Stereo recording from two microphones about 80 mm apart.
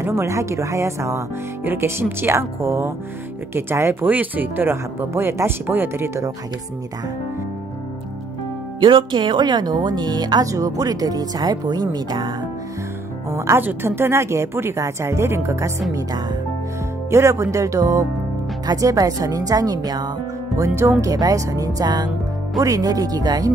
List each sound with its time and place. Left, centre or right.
0.0 s a woman's voice: right
8.7 s speech: right
10.4 s speech: right
13.3 s speech: right
13.6 s a woman's voice: right
17.1 s a woman's voice: right
20.5 s a woman's voice: right